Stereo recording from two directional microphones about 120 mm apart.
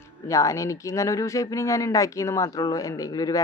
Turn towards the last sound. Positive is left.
turn(degrees=30)  # may be behind; listen again after turning